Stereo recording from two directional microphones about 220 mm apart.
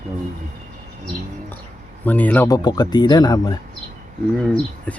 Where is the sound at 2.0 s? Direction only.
5° left (ahead or behind).